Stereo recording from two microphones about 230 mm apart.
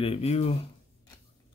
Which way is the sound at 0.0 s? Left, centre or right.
Left.